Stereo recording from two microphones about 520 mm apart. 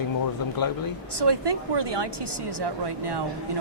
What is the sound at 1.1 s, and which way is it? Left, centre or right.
Speech, right.